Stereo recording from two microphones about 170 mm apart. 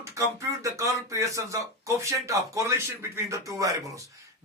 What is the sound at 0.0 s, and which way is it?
Speech, 15° right (ahead or behind).